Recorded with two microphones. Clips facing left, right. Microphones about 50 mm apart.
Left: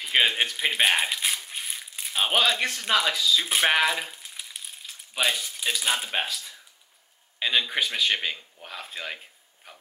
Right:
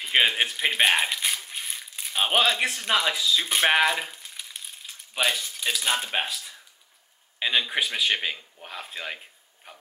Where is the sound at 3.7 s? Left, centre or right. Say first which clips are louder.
Right 1 dB; centre.